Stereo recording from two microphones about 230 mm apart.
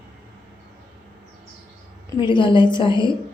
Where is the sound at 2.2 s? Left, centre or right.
Centre.